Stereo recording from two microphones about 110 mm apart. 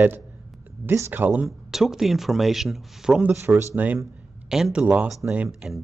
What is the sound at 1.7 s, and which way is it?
A man's voice, 5° right (ahead or behind).